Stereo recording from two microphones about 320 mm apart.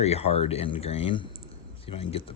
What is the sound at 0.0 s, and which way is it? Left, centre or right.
Speech, centre.